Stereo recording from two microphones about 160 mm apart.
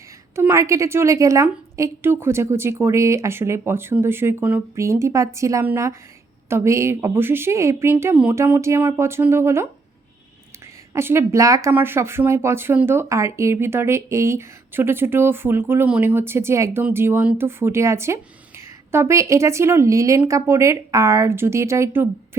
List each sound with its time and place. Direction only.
0.3 s speech: 15° right (ahead or behind)
10.9 s speech: 15° right (ahead or behind)